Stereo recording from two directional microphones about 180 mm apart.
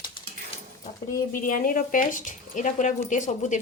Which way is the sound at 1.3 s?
50° left (ahead or behind).